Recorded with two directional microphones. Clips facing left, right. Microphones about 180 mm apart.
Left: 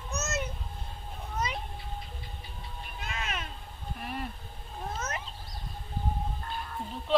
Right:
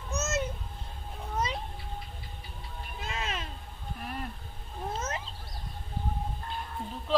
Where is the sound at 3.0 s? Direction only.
30° right (ahead or behind).